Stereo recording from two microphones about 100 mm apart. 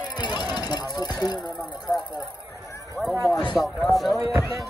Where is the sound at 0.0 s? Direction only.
45° left (ahead or behind).